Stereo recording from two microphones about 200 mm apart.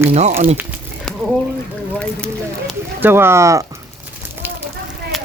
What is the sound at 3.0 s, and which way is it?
Speech, 10° right (ahead or behind).